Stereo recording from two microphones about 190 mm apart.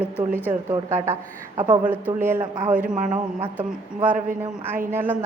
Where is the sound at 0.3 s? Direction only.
10° right (ahead or behind).